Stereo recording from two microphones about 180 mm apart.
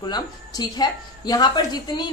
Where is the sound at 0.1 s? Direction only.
20° left (ahead or behind).